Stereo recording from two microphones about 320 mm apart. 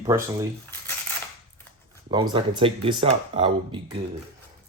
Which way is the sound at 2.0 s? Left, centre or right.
Centre.